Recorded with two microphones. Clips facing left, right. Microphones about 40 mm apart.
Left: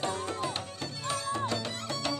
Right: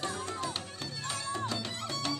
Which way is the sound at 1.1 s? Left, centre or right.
Centre.